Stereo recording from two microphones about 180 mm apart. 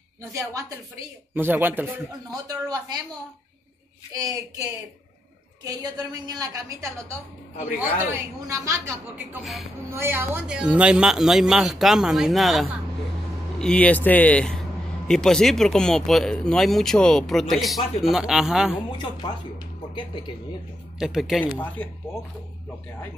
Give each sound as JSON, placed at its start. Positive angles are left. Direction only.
{"t": 0.2, "sound": "a woman's voice", "side_deg": -20}
{"t": 2.3, "sound": "a woman's voice", "side_deg": -20}
{"t": 5.6, "sound": "a woman's voice", "side_deg": -20}
{"t": 9.8, "sound": "speech", "side_deg": -15}
{"t": 18.9, "sound": "speech", "side_deg": 25}
{"t": 21.0, "sound": "speech", "side_deg": 0}